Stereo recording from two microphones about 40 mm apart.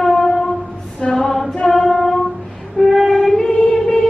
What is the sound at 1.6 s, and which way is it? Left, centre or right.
Music, centre.